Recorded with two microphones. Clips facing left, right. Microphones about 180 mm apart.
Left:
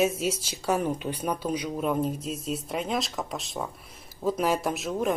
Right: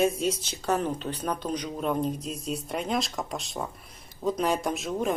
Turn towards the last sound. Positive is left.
turn(degrees=0)  # may be behind; listen again after turning